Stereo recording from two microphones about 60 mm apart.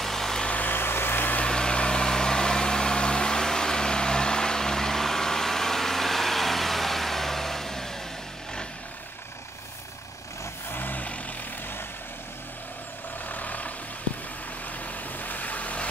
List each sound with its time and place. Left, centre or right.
0.0 s vehicle: centre
0.5 s vehicle: left
1.4 s vehicle: centre
10.7 s vehicle: left
13.3 s vehicle: left
15.1 s vehicle: left